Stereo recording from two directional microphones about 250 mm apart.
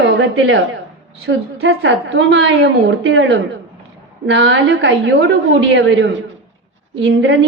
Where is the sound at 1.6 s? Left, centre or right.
Right.